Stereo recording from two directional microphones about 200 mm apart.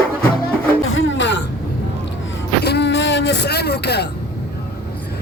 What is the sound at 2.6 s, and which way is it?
Vehicle, 60° left (ahead or behind).